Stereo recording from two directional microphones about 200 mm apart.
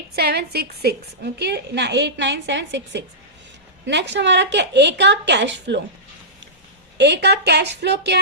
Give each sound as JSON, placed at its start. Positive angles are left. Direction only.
{"t": 0.2, "sound": "a woman's voice", "side_deg": -50}
{"t": 6.9, "sound": "a woman's voice", "side_deg": -60}